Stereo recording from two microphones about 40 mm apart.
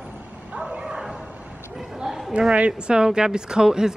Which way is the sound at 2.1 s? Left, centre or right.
Centre.